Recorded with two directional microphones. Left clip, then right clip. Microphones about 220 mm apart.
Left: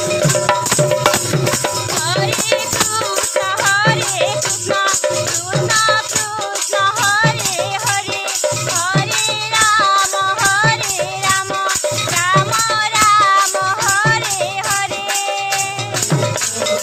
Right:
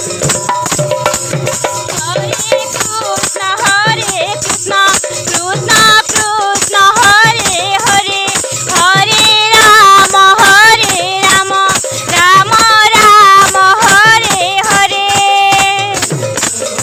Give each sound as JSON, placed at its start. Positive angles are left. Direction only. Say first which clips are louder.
{"t": 3.7, "sound": "music", "louder": "right 5 dB", "side_deg": -45}
{"t": 5.8, "sound": "music", "louder": "right 8 dB", "side_deg": -50}